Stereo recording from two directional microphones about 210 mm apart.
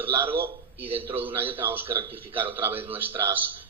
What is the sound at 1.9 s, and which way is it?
Speech, 25° right (ahead or behind).